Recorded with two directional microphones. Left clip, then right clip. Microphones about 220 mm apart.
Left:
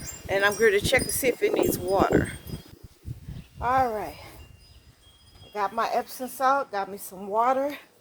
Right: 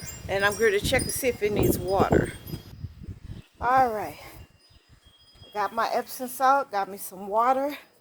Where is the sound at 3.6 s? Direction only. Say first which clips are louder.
Right 2 dB; 40° right (ahead or behind).